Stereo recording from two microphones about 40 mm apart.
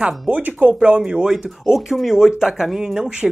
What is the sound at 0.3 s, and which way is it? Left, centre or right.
Speech, right.